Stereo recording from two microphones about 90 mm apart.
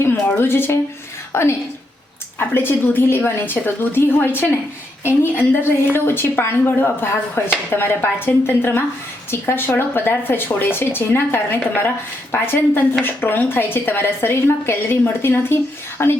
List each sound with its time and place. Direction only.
0.0 s a woman's voice: 25° left (ahead or behind)